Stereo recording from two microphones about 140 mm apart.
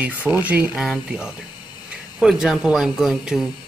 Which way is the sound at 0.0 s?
10° right (ahead or behind).